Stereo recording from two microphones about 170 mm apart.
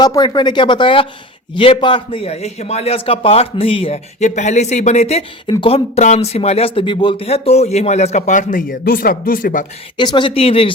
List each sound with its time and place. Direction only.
0.0 s speech: 25° left (ahead or behind); by 9.6 s 55° left (ahead or behind)
10.0 s speech: 30° left (ahead or behind)